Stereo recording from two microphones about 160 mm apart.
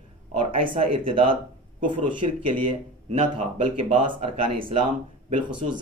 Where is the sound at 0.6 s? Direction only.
35° right (ahead or behind).